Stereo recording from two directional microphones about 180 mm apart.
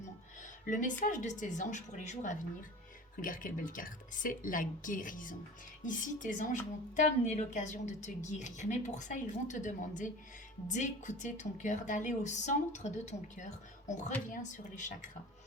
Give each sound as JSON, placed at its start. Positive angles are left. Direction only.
{"t": 0.4, "sound": "a woman's voice", "side_deg": 45}